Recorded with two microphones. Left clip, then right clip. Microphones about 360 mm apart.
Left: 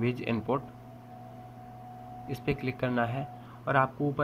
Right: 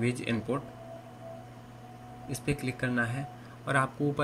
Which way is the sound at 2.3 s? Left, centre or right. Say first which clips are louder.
Left 1 dB; centre.